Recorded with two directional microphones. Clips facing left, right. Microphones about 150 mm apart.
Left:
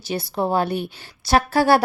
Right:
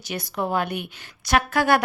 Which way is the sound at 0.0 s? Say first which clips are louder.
Left 4 dB; 30° left (ahead or behind).